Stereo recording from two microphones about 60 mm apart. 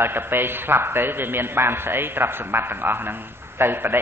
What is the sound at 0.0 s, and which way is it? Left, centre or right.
A man's voice, right.